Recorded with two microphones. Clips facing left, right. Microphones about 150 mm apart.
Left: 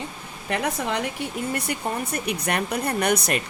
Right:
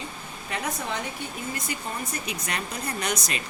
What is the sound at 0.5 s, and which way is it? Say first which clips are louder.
Speech: left 5 dB; 65° left (ahead or behind).